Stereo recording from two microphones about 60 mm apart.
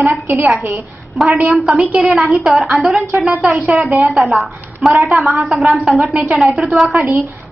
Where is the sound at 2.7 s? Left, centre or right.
Centre.